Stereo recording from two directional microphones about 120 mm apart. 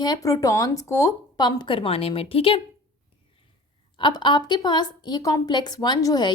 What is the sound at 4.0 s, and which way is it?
A woman's voice, 40° left (ahead or behind).